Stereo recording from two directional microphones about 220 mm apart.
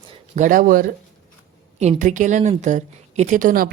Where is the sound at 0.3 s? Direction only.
35° right (ahead or behind).